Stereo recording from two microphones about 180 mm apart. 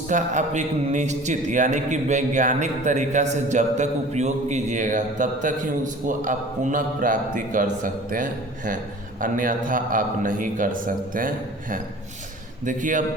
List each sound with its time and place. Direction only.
0.1 s a man's voice: 45° right (ahead or behind)